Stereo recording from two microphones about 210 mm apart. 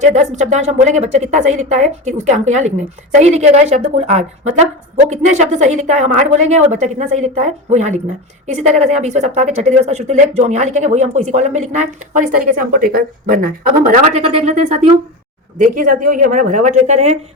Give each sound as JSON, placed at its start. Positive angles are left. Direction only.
{"t": 0.0, "sound": "a woman's voice", "side_deg": -35}